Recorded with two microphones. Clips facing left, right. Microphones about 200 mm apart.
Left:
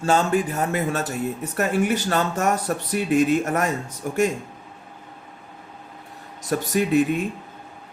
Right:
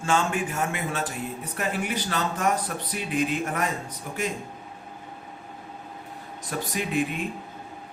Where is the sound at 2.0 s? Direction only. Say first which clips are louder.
Left 4 dB; 45° left (ahead or behind).